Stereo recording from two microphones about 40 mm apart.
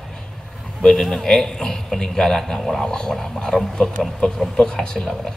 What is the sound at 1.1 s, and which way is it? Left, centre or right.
A man's voice, centre.